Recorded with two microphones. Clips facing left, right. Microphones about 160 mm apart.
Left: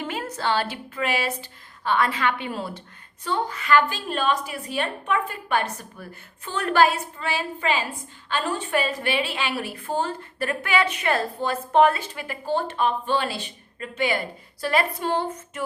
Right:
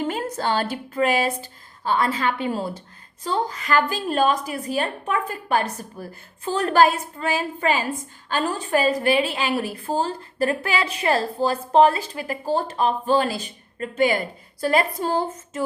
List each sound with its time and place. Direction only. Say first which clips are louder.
0.1 s a woman's voice: right 2 dB; 45° right (ahead or behind)